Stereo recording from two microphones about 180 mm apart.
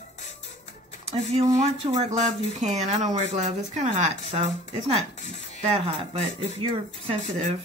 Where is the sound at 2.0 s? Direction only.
40° right (ahead or behind).